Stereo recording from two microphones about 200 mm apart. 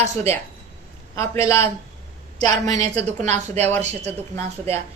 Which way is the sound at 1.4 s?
30° right (ahead or behind).